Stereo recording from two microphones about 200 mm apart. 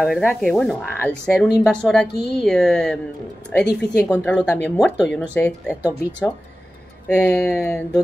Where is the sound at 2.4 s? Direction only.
5° left (ahead or behind).